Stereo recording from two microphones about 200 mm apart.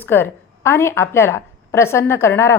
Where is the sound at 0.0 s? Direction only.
10° left (ahead or behind).